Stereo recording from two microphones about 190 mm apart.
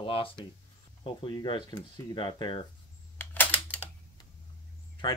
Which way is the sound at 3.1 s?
10° left (ahead or behind).